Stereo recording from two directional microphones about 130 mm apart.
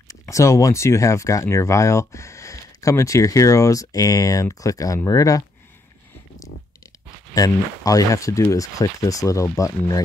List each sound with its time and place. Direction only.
0.1 s speech: 25° left (ahead or behind)
7.3 s speech: 25° left (ahead or behind)